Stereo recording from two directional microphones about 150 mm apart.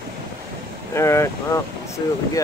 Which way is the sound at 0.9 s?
20° left (ahead or behind).